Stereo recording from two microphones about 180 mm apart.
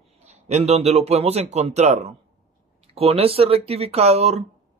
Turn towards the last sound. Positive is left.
turn(degrees=-35)  # may be behind; listen again after turning